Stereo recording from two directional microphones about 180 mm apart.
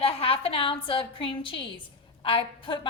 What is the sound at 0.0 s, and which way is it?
A woman's voice, 30° left (ahead or behind).